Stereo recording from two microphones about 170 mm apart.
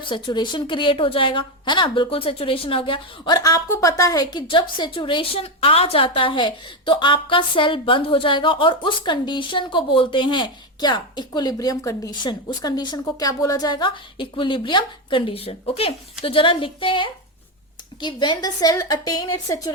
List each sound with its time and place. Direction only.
0.0 s a woman's voice: 25° left (ahead or behind)